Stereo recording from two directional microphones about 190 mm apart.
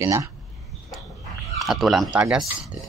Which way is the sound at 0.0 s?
15° right (ahead or behind).